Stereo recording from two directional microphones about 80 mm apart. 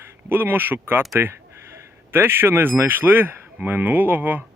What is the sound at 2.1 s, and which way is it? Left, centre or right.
Speech, right.